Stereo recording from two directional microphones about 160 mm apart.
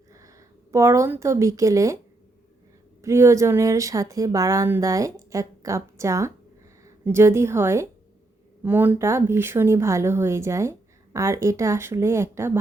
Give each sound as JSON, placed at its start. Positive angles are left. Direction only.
{"t": 0.1, "sound": "speech", "side_deg": -20}
{"t": 3.0, "sound": "a woman's voice", "side_deg": -15}